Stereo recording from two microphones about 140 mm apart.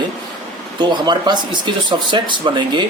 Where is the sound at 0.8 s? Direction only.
30° right (ahead or behind).